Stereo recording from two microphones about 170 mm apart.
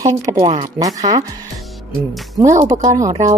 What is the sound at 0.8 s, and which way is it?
Speech, 20° right (ahead or behind).